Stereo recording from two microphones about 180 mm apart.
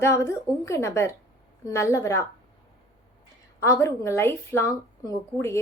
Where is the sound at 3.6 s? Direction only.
15° left (ahead or behind).